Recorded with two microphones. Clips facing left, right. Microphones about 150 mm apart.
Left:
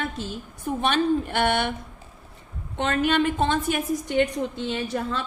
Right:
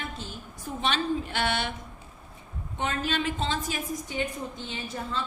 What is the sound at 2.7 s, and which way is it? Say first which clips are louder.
A woman's voice: left 7 dB; 65° left (ahead or behind).